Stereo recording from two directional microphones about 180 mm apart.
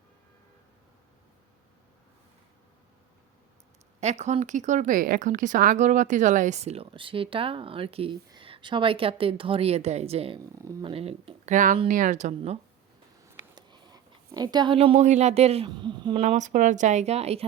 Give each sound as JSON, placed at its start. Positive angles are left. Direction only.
{"t": 4.0, "sound": "speech", "side_deg": -40}
{"t": 10.5, "sound": "speech", "side_deg": -15}
{"t": 10.8, "sound": "speech", "side_deg": -35}
{"t": 13.2, "sound": "speech", "side_deg": -25}
{"t": 16.2, "sound": "speech", "side_deg": -40}